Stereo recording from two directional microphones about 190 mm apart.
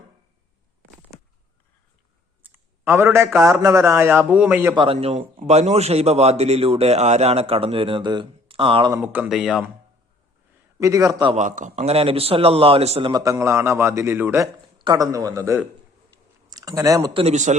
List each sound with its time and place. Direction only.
2.4 s a man's voice: 10° right (ahead or behind)
4.7 s a man's voice: 30° right (ahead or behind)
9.0 s speech: 5° right (ahead or behind)
10.8 s a man's voice: 15° right (ahead or behind)
11.3 s a man's voice: 40° right (ahead or behind); by 17.2 s 20° right (ahead or behind)
17.2 s a man's voice: 40° right (ahead or behind)